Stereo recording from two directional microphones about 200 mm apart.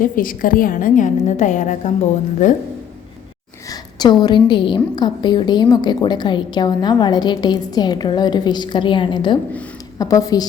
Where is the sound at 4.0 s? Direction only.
20° left (ahead or behind).